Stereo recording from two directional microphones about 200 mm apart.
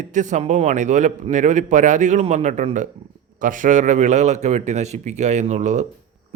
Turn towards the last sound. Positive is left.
turn(degrees=-35)  # may be behind; listen again after turning